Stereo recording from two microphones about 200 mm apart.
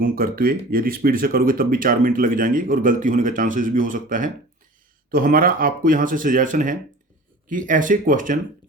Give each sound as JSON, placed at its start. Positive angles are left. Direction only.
{"t": 0.0, "sound": "speech", "side_deg": -45}